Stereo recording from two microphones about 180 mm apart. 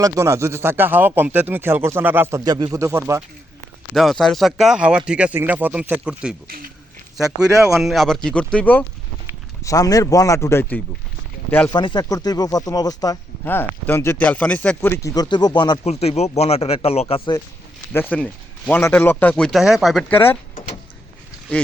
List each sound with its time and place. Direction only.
0.0 s speech: 15° right (ahead or behind)
3.9 s speech: centre (ahead or behind)
7.6 s speech: centre (ahead or behind)
9.6 s a man's voice: 20° left (ahead or behind)
11.7 s speech: 25° left (ahead or behind)
15.9 s speech: 35° left (ahead or behind)
17.9 s a man's voice: 10° left (ahead or behind)
21.5 s a man's voice: 10° left (ahead or behind)